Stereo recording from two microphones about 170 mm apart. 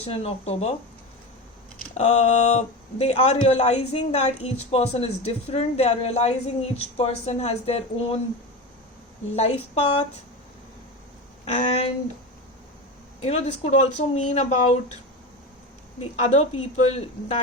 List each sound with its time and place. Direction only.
0.0 s speech: 35° left (ahead or behind)
2.0 s speech: 40° left (ahead or behind)
9.3 s speech: 40° left (ahead or behind)
11.4 s speech: 40° left (ahead or behind)
13.2 s speech: 40° left (ahead or behind)
16.0 s speech: 40° left (ahead or behind)